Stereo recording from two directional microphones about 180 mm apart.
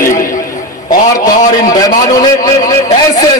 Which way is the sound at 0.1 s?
20° left (ahead or behind).